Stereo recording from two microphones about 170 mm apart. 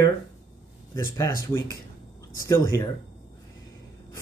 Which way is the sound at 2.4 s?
20° left (ahead or behind).